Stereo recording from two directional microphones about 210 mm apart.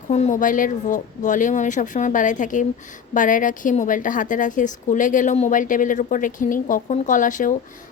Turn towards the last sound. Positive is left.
turn(degrees=40)  # may be behind; listen again after turning